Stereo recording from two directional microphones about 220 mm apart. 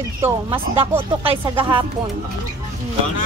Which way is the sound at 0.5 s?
25° right (ahead or behind).